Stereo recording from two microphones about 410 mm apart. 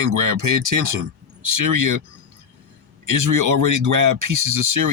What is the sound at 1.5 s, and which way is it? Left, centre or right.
Speech, right.